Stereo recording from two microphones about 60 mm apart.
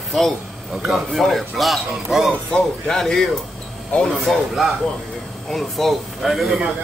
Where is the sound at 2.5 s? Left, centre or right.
Centre.